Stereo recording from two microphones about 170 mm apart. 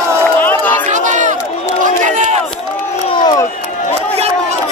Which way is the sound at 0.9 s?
45° right (ahead or behind).